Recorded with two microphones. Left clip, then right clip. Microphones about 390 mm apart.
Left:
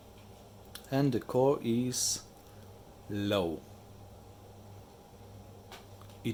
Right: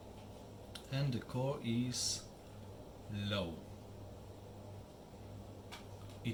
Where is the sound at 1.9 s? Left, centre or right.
Centre.